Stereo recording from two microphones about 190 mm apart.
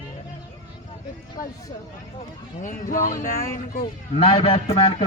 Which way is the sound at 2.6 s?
45° left (ahead or behind).